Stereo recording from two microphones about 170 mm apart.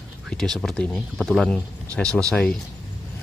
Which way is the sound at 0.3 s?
Centre (ahead or behind).